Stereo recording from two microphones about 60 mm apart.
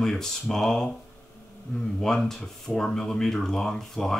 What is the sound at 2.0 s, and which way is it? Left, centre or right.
Speech, centre.